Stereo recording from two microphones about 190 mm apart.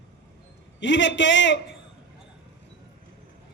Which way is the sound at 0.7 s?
75° left (ahead or behind).